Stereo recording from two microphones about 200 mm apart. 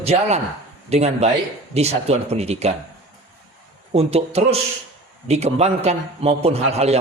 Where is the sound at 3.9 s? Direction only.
30° right (ahead or behind).